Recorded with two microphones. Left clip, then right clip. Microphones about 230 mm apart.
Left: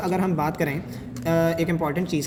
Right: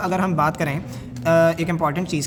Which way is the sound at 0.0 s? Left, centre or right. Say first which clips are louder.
Right 4 dB; right.